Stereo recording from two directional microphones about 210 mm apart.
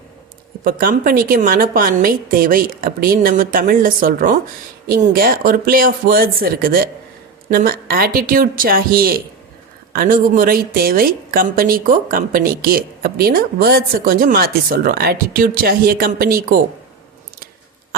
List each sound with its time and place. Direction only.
0.6 s a woman's voice: 45° right (ahead or behind)